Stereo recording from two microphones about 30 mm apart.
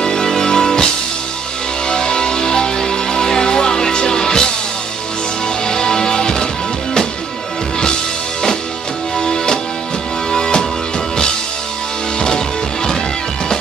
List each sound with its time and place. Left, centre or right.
0.0 s music: left
1.9 s music: left
5.7 s music: left
9.2 s music: left
12.2 s music: left